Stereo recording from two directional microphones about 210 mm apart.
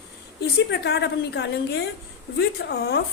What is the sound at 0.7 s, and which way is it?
A woman's voice, 55° left (ahead or behind).